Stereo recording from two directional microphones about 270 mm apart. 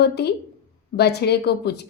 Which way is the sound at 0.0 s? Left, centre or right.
Left.